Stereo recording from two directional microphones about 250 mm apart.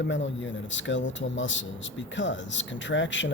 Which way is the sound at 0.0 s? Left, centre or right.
Left.